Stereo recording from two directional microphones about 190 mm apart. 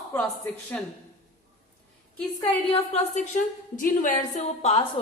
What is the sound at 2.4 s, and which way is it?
A woman's voice, 30° left (ahead or behind).